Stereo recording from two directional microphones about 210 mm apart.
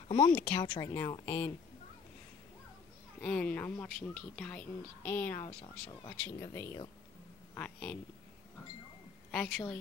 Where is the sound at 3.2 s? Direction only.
5° left (ahead or behind).